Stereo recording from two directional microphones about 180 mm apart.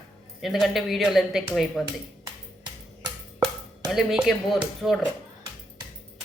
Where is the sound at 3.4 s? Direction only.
Centre (ahead or behind).